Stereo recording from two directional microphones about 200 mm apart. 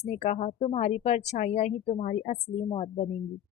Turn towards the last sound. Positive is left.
turn(degrees=30)  # may be behind; listen again after turning